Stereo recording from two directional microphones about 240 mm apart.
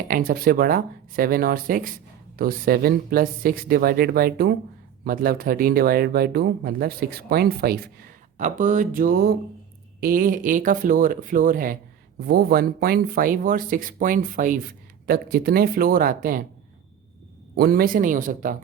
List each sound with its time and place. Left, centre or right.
0.1 s speech: right
17.6 s speech: right